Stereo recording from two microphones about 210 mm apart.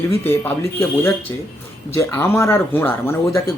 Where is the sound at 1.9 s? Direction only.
10° left (ahead or behind).